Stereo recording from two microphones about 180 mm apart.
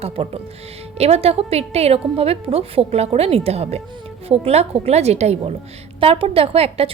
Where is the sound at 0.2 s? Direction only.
30° right (ahead or behind).